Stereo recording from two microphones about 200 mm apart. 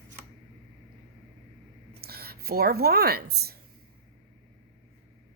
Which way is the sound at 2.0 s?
50° right (ahead or behind).